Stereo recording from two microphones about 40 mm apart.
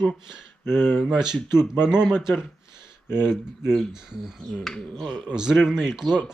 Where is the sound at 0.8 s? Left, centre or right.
Left.